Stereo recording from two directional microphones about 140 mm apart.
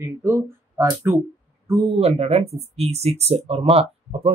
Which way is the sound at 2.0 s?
45° right (ahead or behind).